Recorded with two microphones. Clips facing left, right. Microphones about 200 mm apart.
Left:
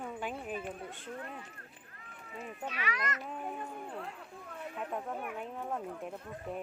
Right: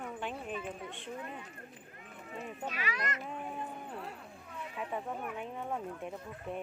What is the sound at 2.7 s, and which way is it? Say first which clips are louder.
Speech: left 2 dB; 35° right (ahead or behind).